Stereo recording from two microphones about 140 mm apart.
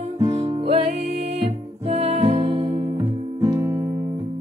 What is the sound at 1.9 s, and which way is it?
Music, 45° right (ahead or behind).